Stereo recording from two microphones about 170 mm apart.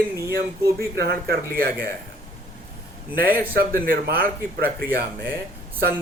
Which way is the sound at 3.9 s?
60° right (ahead or behind).